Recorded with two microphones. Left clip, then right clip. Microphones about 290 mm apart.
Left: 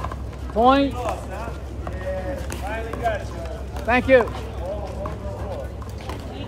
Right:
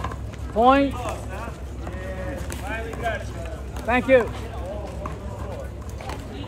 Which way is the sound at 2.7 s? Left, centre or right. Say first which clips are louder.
Left 3 dB; left.